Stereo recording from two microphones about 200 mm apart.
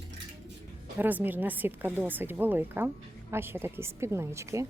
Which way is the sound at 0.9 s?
10° right (ahead or behind).